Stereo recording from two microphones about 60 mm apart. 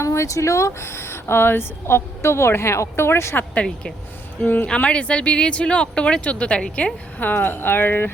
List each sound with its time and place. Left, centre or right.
0.0 s speech: left
3.3 s speech: left
7.2 s speech: left